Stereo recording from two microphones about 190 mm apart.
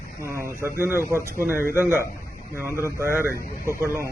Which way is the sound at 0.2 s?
15° right (ahead or behind).